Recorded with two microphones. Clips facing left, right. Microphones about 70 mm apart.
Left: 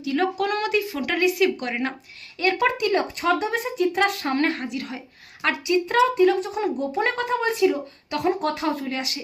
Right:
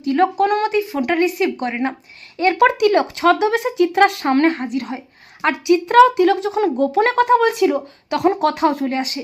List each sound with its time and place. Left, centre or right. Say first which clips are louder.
0.0 s a woman's voice: right 7 dB; right
2.6 s speech: right 10 dB; right
4.9 s a sound: right 6 dB; right
5.6 s a woman's voice: right 9 dB; right
8.9 s speech: right 7 dB; right